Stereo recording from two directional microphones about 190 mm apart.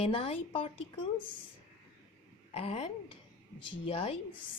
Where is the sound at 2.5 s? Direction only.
35° left (ahead or behind).